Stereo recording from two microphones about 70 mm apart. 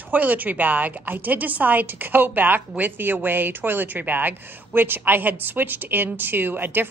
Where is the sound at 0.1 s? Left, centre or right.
Right.